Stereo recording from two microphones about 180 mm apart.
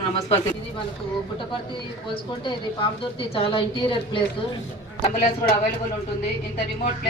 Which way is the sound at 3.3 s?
30° left (ahead or behind).